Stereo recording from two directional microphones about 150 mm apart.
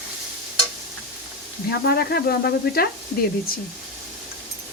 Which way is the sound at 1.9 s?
90° left.